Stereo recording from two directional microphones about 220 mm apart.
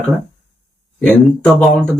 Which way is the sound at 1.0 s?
Centre (ahead or behind).